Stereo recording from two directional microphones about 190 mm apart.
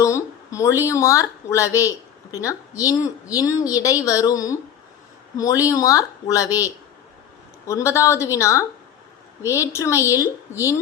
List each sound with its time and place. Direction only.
0.0 s a woman's voice: 15° left (ahead or behind)
7.7 s a woman's voice: 15° left (ahead or behind)